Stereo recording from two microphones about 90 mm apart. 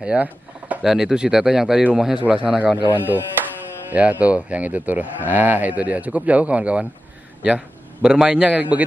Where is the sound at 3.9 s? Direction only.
15° right (ahead or behind).